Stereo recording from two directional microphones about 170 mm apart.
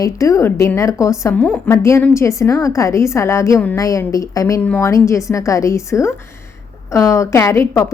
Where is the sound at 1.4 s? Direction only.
5° left (ahead or behind).